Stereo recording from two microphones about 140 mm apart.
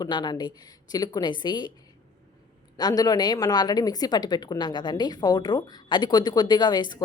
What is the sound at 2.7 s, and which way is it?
A woman's voice, 30° left (ahead or behind).